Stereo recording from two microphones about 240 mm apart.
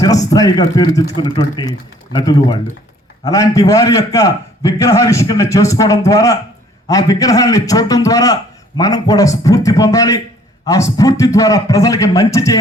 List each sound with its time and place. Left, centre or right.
0.3 s a man's voice: centre